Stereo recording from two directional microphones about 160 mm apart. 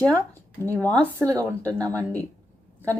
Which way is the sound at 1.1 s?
20° right (ahead or behind).